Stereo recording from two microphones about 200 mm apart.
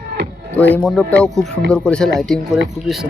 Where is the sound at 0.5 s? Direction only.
5° left (ahead or behind).